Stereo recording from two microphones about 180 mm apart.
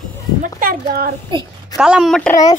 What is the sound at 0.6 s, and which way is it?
Speech, 55° right (ahead or behind).